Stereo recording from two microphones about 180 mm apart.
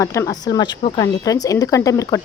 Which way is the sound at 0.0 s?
15° left (ahead or behind).